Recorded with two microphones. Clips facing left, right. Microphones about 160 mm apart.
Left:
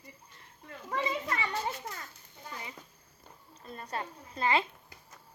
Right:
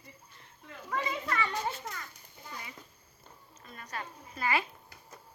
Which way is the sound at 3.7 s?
30° left (ahead or behind).